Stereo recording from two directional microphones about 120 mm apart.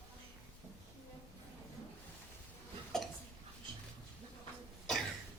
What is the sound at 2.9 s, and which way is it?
Hiccup, 5° left (ahead or behind).